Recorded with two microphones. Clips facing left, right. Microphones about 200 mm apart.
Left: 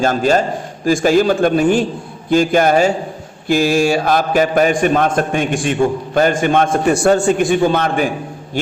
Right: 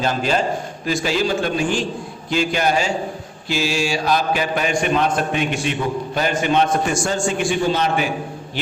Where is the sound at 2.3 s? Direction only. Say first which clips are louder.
Left 7 dB; 50° left (ahead or behind).